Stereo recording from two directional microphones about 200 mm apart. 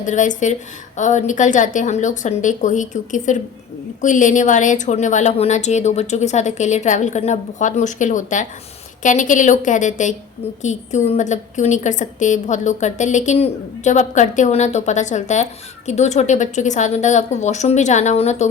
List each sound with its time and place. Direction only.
0.0 s a woman's voice: 40° left (ahead or behind)